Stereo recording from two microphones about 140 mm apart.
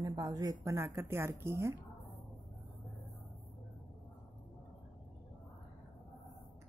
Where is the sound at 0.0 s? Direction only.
25° right (ahead or behind).